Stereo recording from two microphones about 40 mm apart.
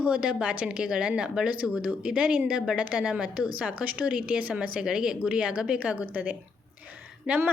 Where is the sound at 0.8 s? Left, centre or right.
Right.